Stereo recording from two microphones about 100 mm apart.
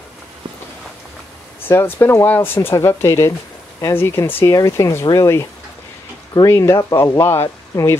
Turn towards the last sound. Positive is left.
turn(degrees=25)  # may be behind; listen again after turning